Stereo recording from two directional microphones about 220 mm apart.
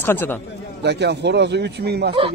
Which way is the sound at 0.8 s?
50° right (ahead or behind).